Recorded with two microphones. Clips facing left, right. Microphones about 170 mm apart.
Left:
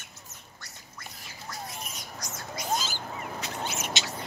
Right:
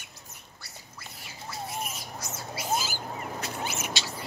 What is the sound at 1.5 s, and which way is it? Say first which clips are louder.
Squawk: right 5 dB; 5° right (ahead or behind).